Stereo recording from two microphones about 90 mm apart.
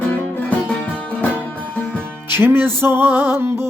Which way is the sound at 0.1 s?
15° left (ahead or behind).